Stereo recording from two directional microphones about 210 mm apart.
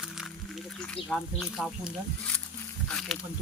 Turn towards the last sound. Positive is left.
turn(degrees=0)  # may be behind; listen again after turning